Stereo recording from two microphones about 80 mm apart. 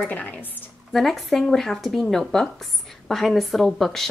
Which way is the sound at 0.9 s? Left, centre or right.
Centre.